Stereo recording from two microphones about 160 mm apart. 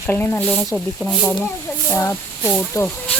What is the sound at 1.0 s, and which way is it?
Speech, centre (ahead or behind).